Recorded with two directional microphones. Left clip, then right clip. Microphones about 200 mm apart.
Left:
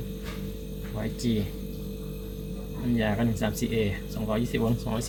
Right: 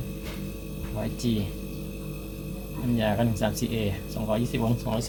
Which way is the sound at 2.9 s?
Centre (ahead or behind).